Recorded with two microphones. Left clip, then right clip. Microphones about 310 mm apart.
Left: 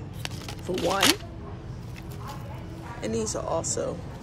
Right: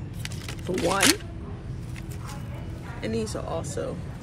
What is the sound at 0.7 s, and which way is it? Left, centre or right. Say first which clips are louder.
Speech: right 1 dB; centre.